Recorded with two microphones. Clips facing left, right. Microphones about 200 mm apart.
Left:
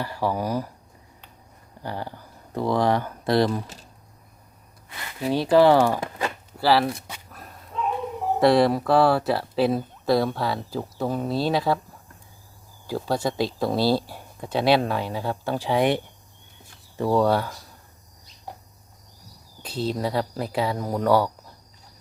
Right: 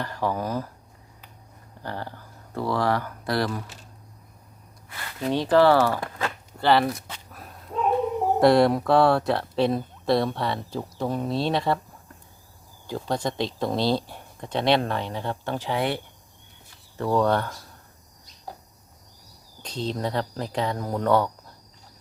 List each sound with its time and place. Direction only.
0.0 s speech: 10° left (ahead or behind)
1.8 s speech: 15° left (ahead or behind)
4.9 s speech: 15° left (ahead or behind)
6.7 s speech: 5° left (ahead or behind)
7.7 s a sound: 50° right (ahead or behind)
8.4 s speech: centre (ahead or behind)
12.9 s speech: 5° left (ahead or behind)
17.0 s speech: 10° left (ahead or behind)
19.6 s speech: 5° left (ahead or behind)